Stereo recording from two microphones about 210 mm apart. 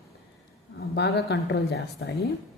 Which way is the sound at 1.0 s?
50° left (ahead or behind).